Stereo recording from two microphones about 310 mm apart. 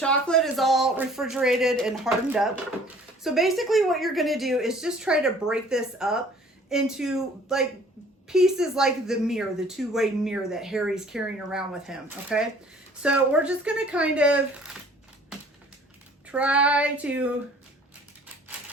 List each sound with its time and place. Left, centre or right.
0.0 s speech: centre
16.2 s speech: centre